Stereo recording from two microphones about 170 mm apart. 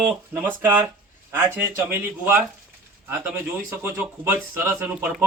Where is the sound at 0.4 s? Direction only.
10° right (ahead or behind).